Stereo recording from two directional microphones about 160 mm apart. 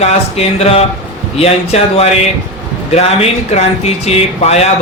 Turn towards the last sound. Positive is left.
turn(degrees=40)  # may be behind; listen again after turning